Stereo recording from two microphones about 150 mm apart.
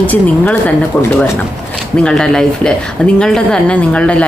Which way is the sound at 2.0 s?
5° left (ahead or behind).